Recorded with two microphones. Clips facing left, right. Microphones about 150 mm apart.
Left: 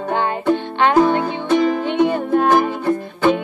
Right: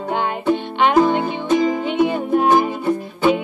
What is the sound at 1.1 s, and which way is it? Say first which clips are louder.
Music: left 1 dB; 60° left (ahead or behind).